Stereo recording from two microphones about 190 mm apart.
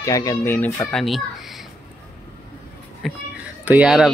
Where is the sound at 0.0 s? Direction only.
15° left (ahead or behind); by 1.2 s centre (ahead or behind).